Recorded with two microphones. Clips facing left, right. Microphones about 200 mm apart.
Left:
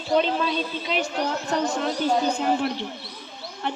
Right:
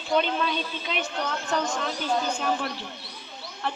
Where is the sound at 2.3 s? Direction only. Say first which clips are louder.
Left 4 dB; 20° left (ahead or behind).